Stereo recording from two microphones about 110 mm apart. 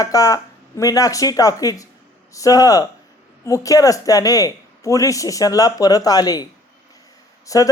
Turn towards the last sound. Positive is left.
turn(degrees=30)  # may be behind; listen again after turning